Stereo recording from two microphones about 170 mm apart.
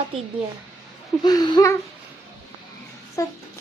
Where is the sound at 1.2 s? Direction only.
25° left (ahead or behind).